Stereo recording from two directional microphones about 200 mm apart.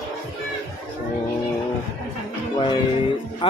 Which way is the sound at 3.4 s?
25° left (ahead or behind).